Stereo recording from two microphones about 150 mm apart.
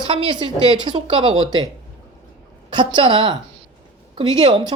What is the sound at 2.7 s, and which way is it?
Speech, 30° right (ahead or behind).